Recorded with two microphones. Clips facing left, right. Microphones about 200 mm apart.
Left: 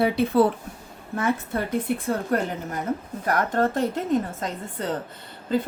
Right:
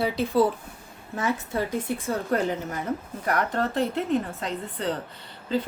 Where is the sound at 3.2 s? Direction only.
45° left (ahead or behind).